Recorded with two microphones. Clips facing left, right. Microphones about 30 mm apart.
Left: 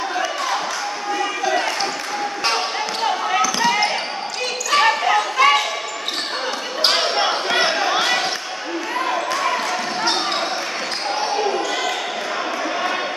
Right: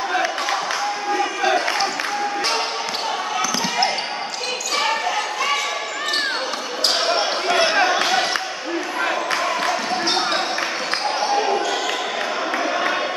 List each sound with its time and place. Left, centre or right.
4.7 s basketball bounce: left
7.2 s basketball bounce: centre